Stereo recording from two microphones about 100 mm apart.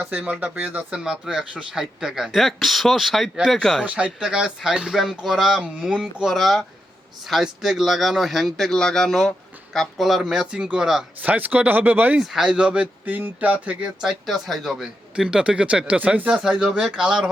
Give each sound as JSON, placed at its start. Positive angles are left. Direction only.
{"t": 0.1, "sound": "speech", "side_deg": -15}
{"t": 3.8, "sound": "speech", "side_deg": -15}
{"t": 12.2, "sound": "speech", "side_deg": -5}